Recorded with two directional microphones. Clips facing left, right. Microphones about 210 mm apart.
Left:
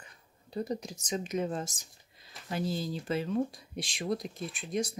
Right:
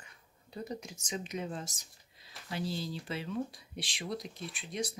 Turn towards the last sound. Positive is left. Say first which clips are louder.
# left 5 dB
turn(degrees=45)  # may be behind; listen again after turning